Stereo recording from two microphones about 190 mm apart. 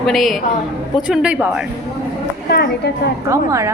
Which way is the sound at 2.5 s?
55° left (ahead or behind).